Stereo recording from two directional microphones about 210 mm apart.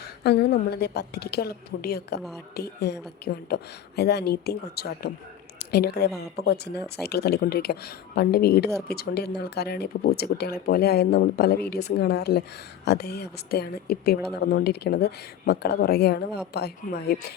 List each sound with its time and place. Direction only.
0.0 s speech: 50° left (ahead or behind)